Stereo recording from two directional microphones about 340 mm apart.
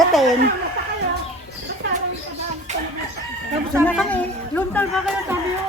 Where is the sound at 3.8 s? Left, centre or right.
Centre.